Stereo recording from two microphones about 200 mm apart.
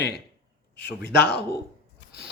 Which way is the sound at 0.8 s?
55° left (ahead or behind).